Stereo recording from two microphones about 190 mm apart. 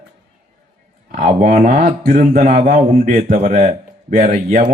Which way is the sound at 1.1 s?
40° right (ahead or behind).